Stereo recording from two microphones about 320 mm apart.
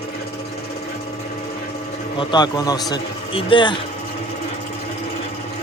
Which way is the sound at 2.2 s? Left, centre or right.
Centre.